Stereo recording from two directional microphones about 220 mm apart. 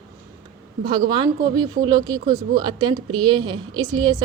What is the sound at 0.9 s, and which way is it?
A woman's voice, 20° right (ahead or behind).